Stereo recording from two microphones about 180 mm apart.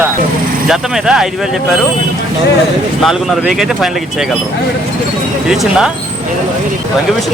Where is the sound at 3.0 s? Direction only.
Centre (ahead or behind).